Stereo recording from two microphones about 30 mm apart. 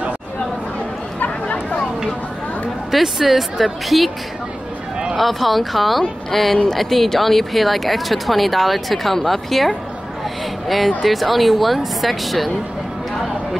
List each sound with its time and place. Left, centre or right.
1.2 s a sound: left
2.9 s speech: centre
5.1 s speech: centre
11.0 s speech: centre